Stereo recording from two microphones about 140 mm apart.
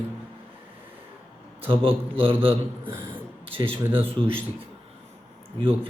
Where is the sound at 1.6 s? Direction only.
40° right (ahead or behind).